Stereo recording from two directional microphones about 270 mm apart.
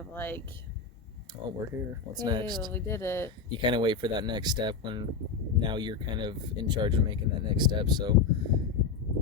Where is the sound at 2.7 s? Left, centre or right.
Centre.